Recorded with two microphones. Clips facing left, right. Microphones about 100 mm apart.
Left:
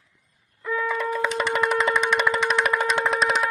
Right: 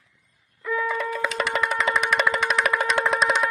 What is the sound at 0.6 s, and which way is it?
Wind instrument, 25° left (ahead or behind).